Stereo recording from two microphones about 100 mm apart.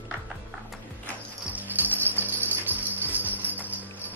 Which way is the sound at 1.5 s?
15° right (ahead or behind).